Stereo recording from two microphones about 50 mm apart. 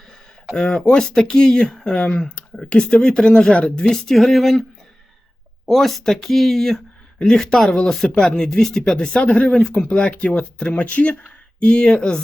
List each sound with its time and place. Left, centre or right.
0.5 s speech: centre
2.0 s speech: left
3.9 s speech: centre
5.6 s speech: centre